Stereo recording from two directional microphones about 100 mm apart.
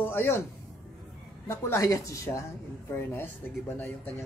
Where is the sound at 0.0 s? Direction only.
20° left (ahead or behind).